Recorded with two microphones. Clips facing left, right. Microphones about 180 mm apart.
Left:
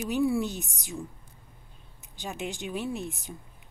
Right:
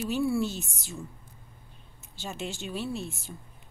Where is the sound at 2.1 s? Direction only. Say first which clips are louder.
Left 1 dB; 15° left (ahead or behind).